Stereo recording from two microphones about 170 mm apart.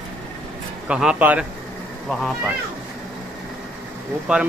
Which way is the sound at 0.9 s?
5° right (ahead or behind).